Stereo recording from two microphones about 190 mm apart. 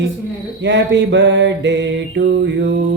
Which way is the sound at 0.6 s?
70° right (ahead or behind).